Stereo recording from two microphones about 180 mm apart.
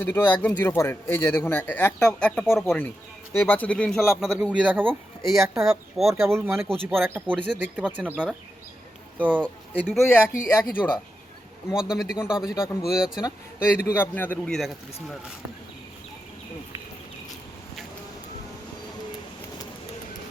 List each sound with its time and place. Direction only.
0.0 s speech: 10° left (ahead or behind)
3.3 s speech: 10° left (ahead or behind); by 10.0 s 5° right (ahead or behind)
10.0 s speech: 10° left (ahead or behind)
11.7 s speech: 5° right (ahead or behind)
13.2 s speech: 15° left (ahead or behind)